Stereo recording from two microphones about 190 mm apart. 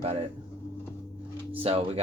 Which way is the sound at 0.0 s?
30° right (ahead or behind).